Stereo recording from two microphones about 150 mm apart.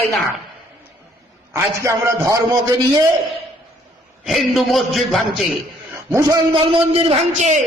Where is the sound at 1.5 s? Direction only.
20° right (ahead or behind).